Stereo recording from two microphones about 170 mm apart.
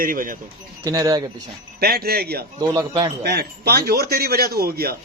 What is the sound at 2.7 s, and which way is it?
Speech, 20° right (ahead or behind).